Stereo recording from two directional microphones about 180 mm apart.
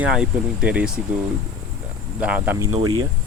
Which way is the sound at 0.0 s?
5° right (ahead or behind).